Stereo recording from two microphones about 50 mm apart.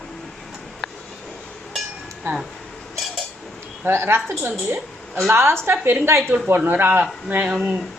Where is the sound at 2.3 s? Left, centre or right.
Right.